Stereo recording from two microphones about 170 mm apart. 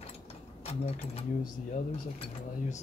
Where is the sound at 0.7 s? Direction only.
35° left (ahead or behind).